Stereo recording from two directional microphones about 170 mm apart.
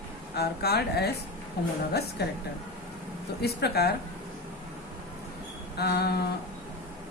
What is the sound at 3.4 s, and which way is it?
Speech, 70° left (ahead or behind).